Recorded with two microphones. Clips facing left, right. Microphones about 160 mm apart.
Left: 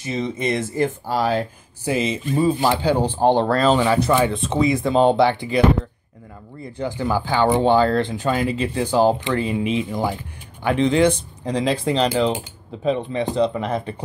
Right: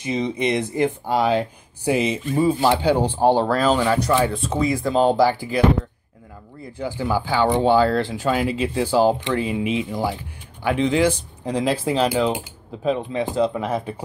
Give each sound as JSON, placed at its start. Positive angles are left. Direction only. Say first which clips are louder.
{"t": 0.0, "sound": "speech", "louder": "right 1 dB", "side_deg": -15}
{"t": 6.6, "sound": "speech", "louder": "left 2 dB", "side_deg": -10}